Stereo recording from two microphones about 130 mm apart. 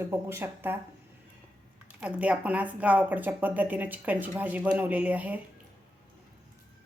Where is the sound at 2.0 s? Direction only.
10° right (ahead or behind).